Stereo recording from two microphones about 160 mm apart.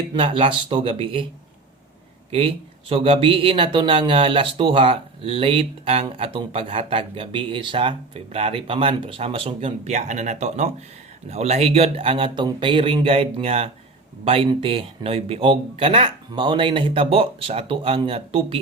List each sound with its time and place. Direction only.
0.1 s speech: 30° right (ahead or behind)
2.9 s speech: 35° right (ahead or behind)